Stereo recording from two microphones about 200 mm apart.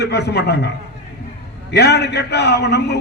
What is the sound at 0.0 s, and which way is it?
Speech, 55° left (ahead or behind).